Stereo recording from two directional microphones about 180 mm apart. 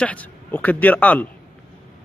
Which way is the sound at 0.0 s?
10° left (ahead or behind).